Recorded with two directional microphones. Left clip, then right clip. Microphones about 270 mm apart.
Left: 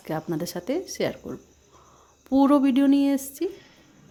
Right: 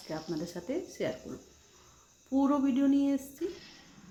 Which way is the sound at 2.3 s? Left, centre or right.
Left.